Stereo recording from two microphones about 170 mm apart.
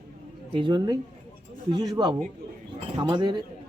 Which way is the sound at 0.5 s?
25° right (ahead or behind).